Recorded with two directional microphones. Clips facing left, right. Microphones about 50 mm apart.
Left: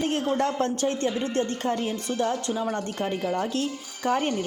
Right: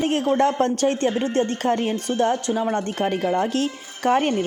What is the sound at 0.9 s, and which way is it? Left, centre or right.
Speech, right.